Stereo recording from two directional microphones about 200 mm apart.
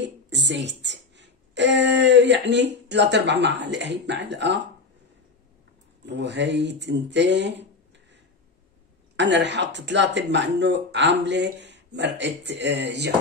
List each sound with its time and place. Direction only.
0.0 s a woman's voice: 60° right (ahead or behind)
6.0 s speech: 60° right (ahead or behind)
9.1 s speech: 60° right (ahead or behind)